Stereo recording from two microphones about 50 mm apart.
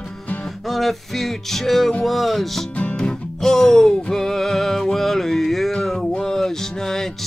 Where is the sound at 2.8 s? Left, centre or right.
Centre.